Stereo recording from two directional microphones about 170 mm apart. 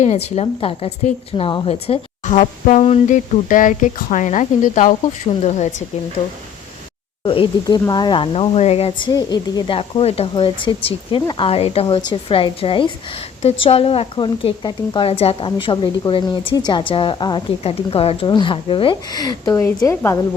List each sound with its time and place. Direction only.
0.0 s a woman's voice: 40° left (ahead or behind)
7.3 s a woman's voice: 25° left (ahead or behind)